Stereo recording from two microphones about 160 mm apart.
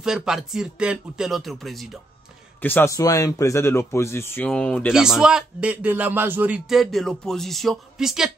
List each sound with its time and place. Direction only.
0.0 s a man's voice: 5° right (ahead or behind)
2.6 s speech: 15° left (ahead or behind)
4.9 s a man's voice: 5° right (ahead or behind)